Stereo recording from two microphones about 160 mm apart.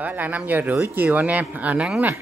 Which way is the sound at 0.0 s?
10° right (ahead or behind).